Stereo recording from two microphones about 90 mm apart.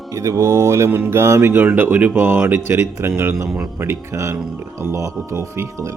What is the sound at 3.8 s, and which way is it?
Speech, 30° right (ahead or behind).